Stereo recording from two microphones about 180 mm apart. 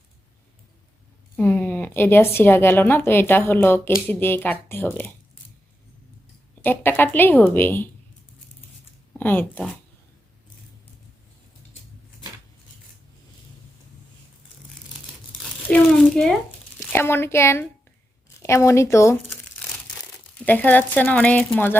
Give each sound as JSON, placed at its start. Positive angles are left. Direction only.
{"t": 1.4, "sound": "a woman's voice", "side_deg": 10}
{"t": 6.6, "sound": "a woman's voice", "side_deg": 10}
{"t": 9.1, "sound": "speech", "side_deg": 10}
{"t": 15.7, "sound": "a woman's voice", "side_deg": 5}
{"t": 20.4, "sound": "a woman's voice", "side_deg": 10}